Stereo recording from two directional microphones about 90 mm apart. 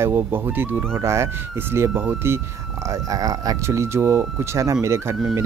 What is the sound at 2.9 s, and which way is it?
Speech, 40° right (ahead or behind).